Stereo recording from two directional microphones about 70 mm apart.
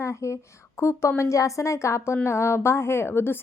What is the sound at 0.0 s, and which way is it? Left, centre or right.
A woman's voice, left.